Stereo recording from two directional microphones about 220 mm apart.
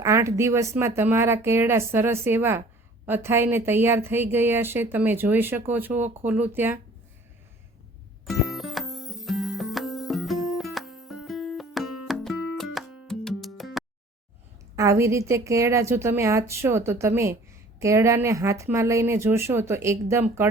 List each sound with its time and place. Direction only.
0.0 s speech: 15° right (ahead or behind)
8.3 s music: centre (ahead or behind)
14.8 s speech: 15° right (ahead or behind)